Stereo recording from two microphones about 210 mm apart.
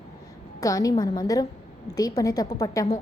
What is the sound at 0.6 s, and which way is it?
A woman's voice, 15° left (ahead or behind).